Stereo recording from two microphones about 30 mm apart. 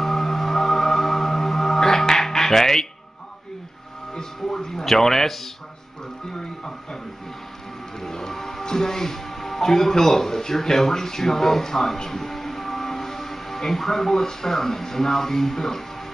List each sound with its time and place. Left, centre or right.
0.0 s music: centre
4.1 s music: centre
6.3 s music: left
8.0 s music: centre
9.7 s speech: centre